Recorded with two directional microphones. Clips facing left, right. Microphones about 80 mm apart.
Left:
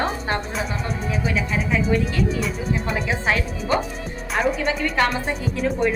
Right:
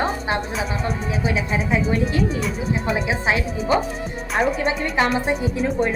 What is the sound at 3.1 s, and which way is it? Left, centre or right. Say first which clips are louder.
Speech: left 2 dB; centre.